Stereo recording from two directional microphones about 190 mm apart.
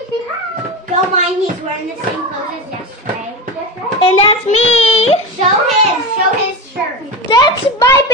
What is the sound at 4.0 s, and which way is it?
Child singing, 30° left (ahead or behind).